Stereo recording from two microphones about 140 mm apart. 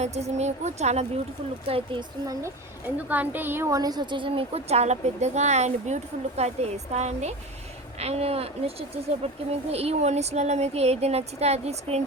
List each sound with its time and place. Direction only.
0.0 s a woman's voice: 50° right (ahead or behind)
1.6 s speech: 40° right (ahead or behind)
2.2 s speech: 25° right (ahead or behind)
3.1 s a woman's voice: 15° right (ahead or behind); by 12.0 s 50° right (ahead or behind)